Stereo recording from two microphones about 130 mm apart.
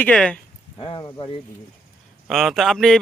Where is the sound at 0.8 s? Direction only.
40° left (ahead or behind).